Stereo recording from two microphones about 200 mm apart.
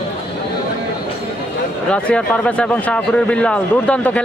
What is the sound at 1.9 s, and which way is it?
Speech, 5° left (ahead or behind).